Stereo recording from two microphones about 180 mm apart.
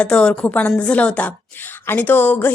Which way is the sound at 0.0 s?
5° left (ahead or behind).